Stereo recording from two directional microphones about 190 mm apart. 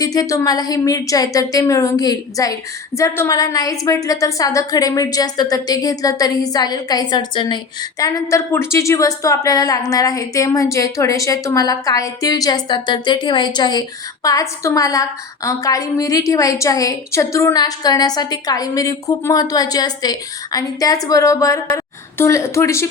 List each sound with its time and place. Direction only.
0.0 s a woman's voice: 20° left (ahead or behind)